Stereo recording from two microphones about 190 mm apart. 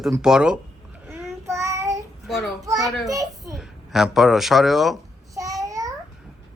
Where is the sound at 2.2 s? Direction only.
Centre (ahead or behind).